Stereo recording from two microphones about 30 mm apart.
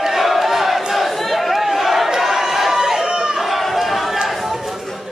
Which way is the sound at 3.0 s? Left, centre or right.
Right.